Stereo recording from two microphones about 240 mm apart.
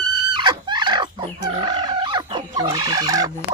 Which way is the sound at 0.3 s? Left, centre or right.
Centre.